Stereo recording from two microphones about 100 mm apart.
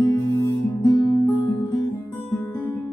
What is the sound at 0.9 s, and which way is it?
Music, 45° left (ahead or behind).